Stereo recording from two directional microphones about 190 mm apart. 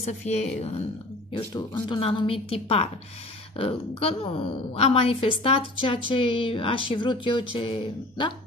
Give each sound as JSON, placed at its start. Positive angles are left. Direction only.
{"t": 0.2, "sound": "speech", "side_deg": 35}
{"t": 1.3, "sound": "a woman's voice", "side_deg": 25}